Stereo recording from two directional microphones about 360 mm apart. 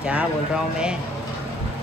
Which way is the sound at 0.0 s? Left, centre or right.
Centre.